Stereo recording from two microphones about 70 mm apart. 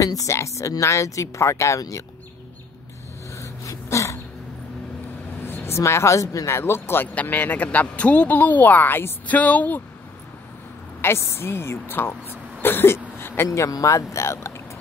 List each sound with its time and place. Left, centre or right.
0.0 s speech: left
3.3 s a sound: left
5.4 s vehicle: left
5.8 s speech: left
7.2 s speech: left
11.0 s speech: left
13.5 s speech: left